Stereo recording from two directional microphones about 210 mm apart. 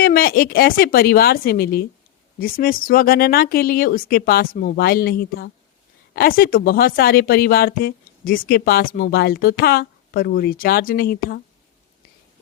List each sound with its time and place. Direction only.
0.0 s speech: 45° left (ahead or behind)